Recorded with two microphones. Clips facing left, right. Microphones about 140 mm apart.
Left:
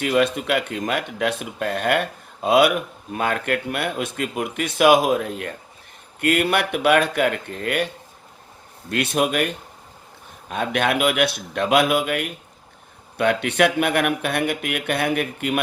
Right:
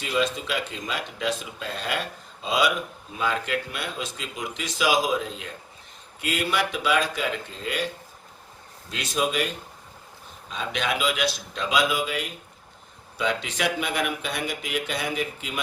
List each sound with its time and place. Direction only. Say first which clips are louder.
0.0 s speech: left 6 dB; 60° left (ahead or behind)
8.9 s speech: left 6 dB; 60° left (ahead or behind)